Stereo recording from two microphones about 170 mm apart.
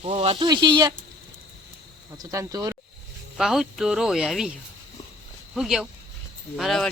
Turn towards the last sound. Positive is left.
turn(degrees=0)  # may be behind; listen again after turning